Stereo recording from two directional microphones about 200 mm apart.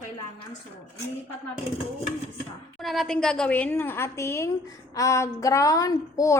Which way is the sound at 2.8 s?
Centre (ahead or behind).